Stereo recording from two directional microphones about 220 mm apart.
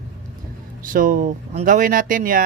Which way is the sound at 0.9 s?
40° right (ahead or behind).